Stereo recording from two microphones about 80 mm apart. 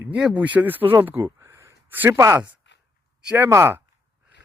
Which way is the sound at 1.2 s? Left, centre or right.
Right.